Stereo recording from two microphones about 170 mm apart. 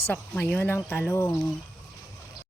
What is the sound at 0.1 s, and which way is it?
Speech, 10° left (ahead or behind).